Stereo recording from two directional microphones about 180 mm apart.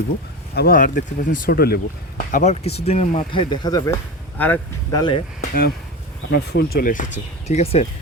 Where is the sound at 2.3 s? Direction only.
40° left (ahead or behind).